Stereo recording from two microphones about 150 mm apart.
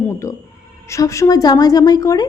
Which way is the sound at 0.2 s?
20° left (ahead or behind).